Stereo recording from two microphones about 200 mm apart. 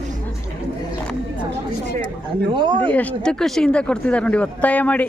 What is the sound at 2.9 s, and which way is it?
Speech, 5° left (ahead or behind).